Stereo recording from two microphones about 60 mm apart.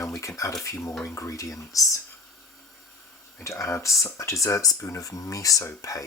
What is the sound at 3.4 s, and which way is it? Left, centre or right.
Speech, left.